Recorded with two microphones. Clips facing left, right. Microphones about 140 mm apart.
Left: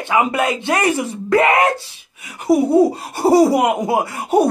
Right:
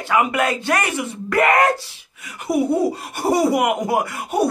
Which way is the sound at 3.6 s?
20° left (ahead or behind).